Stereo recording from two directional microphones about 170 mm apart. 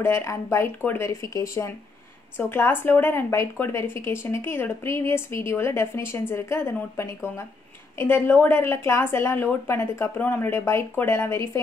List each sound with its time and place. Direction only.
0.0 s speech: 15° left (ahead or behind)